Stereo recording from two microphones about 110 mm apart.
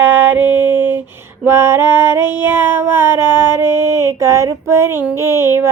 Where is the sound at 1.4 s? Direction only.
20° right (ahead or behind).